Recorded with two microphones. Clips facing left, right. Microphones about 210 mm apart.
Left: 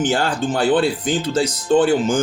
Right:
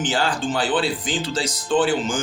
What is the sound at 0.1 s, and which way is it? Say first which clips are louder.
Speech: left 3 dB; 50° left (ahead or behind).